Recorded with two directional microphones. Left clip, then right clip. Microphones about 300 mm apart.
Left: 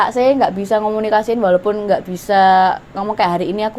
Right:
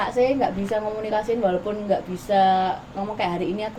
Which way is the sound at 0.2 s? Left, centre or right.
Left.